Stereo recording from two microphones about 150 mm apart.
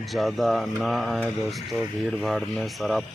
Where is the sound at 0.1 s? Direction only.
Centre (ahead or behind).